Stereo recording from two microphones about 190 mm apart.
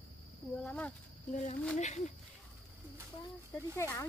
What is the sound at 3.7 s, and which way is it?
Speech, 15° left (ahead or behind).